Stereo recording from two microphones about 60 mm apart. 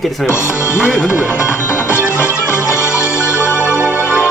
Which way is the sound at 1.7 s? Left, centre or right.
Left.